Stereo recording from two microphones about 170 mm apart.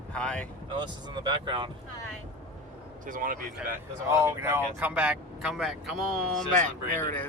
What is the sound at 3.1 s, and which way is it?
Speech, 55° right (ahead or behind).